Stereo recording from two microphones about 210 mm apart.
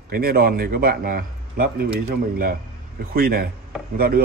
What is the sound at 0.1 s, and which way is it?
A man's voice, 45° right (ahead or behind).